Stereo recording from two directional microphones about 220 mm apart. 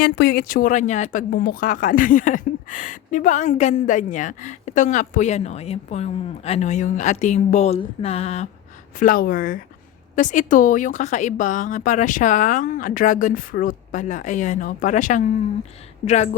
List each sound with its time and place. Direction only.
0.0 s speech: 45° left (ahead or behind); by 8.4 s 30° left (ahead or behind)
9.0 s speech: 40° left (ahead or behind)